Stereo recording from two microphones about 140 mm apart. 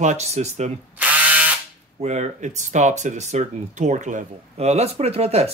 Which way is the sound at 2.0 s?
55° right (ahead or behind).